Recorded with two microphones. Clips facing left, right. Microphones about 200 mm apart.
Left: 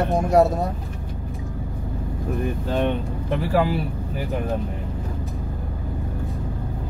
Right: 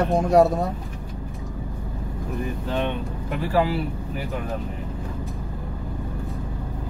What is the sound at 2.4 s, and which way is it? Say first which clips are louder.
Speech: left 3 dB; 50° left (ahead or behind).